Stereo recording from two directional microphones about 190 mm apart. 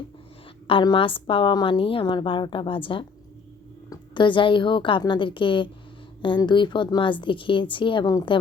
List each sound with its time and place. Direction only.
0.7 s a woman's voice: 25° left (ahead or behind)